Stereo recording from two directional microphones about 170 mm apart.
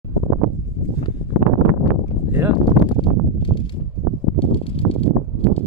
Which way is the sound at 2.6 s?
25° left (ahead or behind).